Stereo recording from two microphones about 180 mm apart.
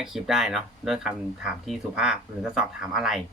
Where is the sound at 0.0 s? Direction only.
Centre (ahead or behind).